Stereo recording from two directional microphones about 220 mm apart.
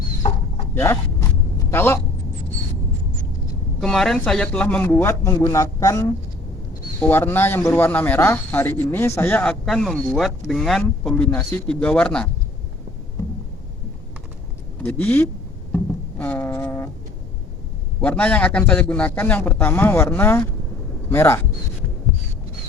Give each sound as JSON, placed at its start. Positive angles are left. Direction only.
{"t": 0.2, "sound": "a sound", "side_deg": 30}
{"t": 0.7, "sound": "vehicle", "side_deg": 10}
{"t": 1.7, "sound": "a man's voice", "side_deg": 10}
{"t": 3.8, "sound": "speech", "side_deg": 0}
{"t": 14.8, "sound": "speech", "side_deg": 10}
{"t": 15.7, "sound": "a sound", "side_deg": 5}
{"t": 18.0, "sound": "speech", "side_deg": 5}